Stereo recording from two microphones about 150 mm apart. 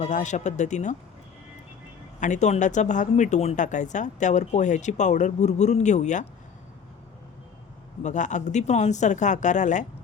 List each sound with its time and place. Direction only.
0.0 s speech: 55° left (ahead or behind)
2.2 s speech: 50° left (ahead or behind)
8.0 s speech: 55° left (ahead or behind)